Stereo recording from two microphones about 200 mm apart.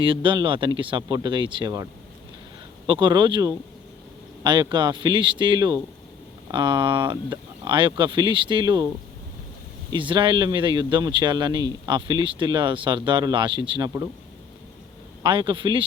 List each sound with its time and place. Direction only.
0.0 s a man's voice: 25° right (ahead or behind)
9.9 s a man's voice: 25° right (ahead or behind)
15.2 s a man's voice: 20° right (ahead or behind)